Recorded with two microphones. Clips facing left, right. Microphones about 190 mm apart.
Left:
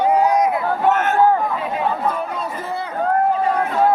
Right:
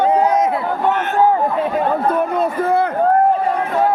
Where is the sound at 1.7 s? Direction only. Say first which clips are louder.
Right 3 dB; 60° right (ahead or behind).